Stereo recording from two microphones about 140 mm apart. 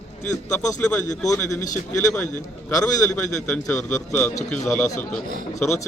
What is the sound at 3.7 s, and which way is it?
A man's voice, 15° left (ahead or behind).